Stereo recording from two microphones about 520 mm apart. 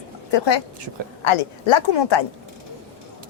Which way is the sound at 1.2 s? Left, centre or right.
Left.